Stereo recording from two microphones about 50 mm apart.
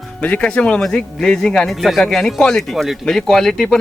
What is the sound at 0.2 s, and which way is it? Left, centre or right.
Speech, left.